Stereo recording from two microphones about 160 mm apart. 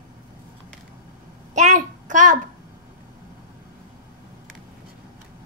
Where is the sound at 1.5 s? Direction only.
50° right (ahead or behind).